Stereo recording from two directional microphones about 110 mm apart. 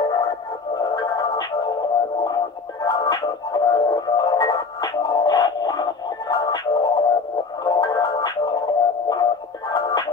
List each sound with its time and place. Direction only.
0.7 s music: 35° left (ahead or behind)